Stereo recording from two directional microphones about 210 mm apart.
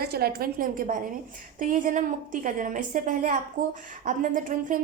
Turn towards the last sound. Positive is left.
turn(degrees=-40)  # may be behind; listen again after turning